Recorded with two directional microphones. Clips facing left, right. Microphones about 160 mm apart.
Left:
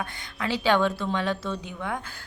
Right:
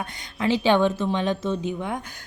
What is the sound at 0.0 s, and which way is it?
A woman's voice, 20° right (ahead or behind).